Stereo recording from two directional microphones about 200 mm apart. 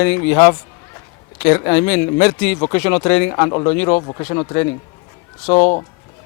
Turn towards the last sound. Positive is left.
turn(degrees=30)  # may be behind; listen again after turning